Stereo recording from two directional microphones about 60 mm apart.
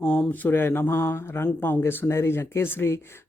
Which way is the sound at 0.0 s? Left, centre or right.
Left.